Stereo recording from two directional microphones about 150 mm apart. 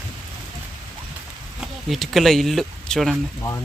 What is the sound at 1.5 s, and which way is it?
Speech, centre (ahead or behind).